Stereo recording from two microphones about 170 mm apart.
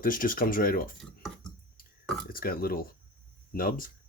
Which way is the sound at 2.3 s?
60° left (ahead or behind).